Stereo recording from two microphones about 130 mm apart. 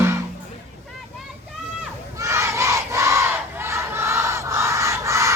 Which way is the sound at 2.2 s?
20° right (ahead or behind).